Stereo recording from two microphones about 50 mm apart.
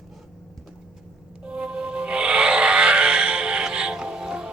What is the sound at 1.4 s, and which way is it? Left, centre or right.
Music, right.